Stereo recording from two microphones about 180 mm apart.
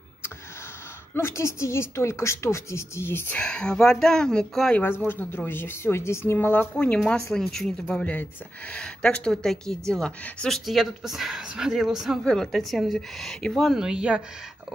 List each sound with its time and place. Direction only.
1.1 s a woman's voice: 15° left (ahead or behind); by 14.2 s 5° right (ahead or behind)